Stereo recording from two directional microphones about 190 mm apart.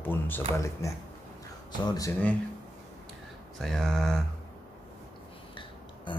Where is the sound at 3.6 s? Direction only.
Centre (ahead or behind).